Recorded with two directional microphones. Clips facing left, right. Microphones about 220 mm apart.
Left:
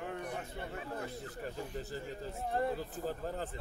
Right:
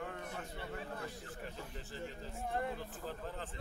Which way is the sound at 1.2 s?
40° left (ahead or behind).